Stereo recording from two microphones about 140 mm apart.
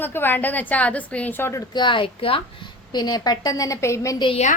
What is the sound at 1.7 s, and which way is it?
Speech, 35° left (ahead or behind).